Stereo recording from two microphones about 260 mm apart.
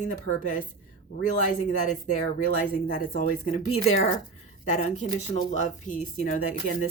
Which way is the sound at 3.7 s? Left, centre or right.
Left.